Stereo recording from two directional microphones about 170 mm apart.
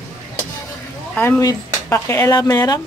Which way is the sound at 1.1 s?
10° left (ahead or behind).